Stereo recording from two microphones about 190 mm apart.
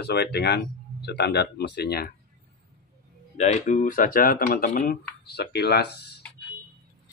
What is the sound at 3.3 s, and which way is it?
Speech, 35° left (ahead or behind).